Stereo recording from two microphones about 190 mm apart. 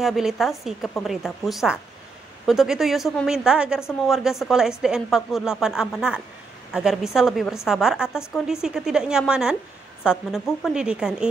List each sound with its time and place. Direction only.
0.0 s a woman's voice: centre (ahead or behind)